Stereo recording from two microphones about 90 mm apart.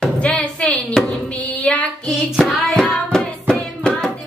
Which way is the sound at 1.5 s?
15° left (ahead or behind).